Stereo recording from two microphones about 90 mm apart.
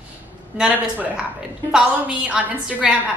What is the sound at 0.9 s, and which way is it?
A woman's voice, 15° right (ahead or behind).